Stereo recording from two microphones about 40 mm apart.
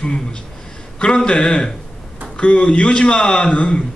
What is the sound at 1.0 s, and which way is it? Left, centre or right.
A man's voice, left.